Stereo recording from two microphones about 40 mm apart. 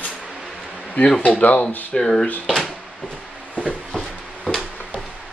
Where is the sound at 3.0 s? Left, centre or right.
Left.